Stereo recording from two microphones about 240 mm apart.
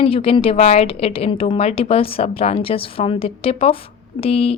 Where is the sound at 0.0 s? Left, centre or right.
Left.